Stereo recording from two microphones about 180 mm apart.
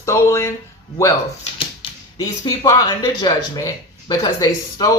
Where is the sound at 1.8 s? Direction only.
30° left (ahead or behind).